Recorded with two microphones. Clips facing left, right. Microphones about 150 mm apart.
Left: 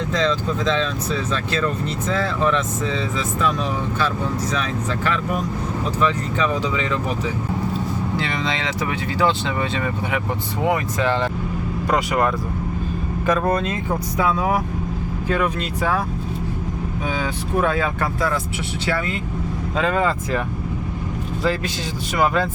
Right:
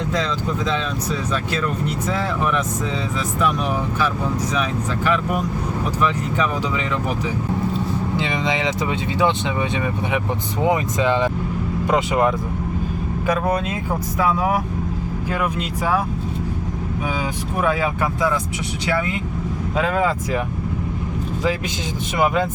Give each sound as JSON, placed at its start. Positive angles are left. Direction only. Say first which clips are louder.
{"t": 0.1, "sound": "speech", "louder": "left 4 dB", "side_deg": -10}
{"t": 5.0, "sound": "speech", "louder": "right 3 dB", "side_deg": -10}
{"t": 8.1, "sound": "speech", "louder": "right 2 dB", "side_deg": -20}
{"t": 13.2, "sound": "speech", "louder": "left 1 dB", "side_deg": -10}
{"t": 17.6, "sound": "speech", "louder": "right 1 dB", "side_deg": -10}